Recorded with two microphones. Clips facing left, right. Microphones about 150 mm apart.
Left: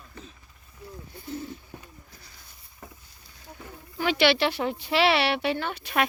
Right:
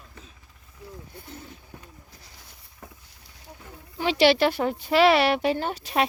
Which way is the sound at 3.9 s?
30° right (ahead or behind).